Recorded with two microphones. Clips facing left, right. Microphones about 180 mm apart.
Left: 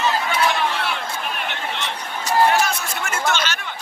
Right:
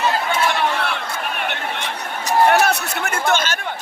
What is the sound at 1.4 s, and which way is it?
Chatter, 55° right (ahead or behind).